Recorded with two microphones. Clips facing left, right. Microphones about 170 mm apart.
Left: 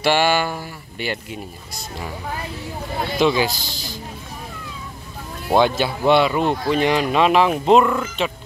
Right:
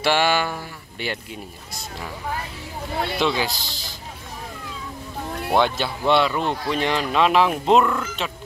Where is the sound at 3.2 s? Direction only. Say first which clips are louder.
Left 7 dB; 5° left (ahead or behind).